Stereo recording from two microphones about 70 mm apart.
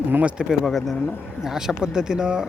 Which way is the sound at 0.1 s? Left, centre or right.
Centre.